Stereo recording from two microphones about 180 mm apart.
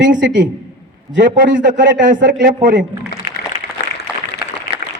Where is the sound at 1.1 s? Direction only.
75° right (ahead or behind).